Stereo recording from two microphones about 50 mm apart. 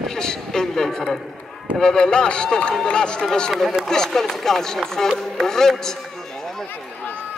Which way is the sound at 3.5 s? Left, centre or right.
Centre.